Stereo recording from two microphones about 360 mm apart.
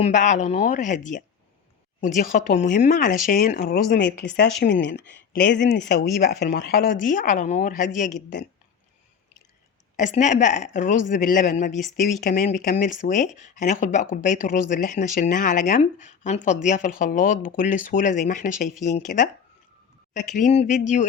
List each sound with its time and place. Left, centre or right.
0.0 s speech: left
10.0 s speech: centre
20.3 s speech: centre